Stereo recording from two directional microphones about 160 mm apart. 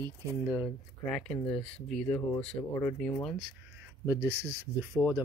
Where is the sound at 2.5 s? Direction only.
25° left (ahead or behind).